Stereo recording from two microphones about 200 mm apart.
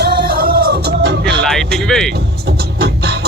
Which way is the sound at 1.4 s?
Centre (ahead or behind).